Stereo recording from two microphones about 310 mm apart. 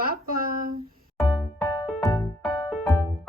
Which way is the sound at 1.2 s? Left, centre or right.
Centre.